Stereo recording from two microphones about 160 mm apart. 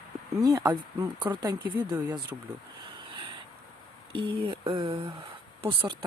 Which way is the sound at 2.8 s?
30° right (ahead or behind).